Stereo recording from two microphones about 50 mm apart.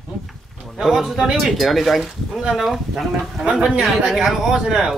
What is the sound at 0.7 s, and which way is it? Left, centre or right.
Speech, centre.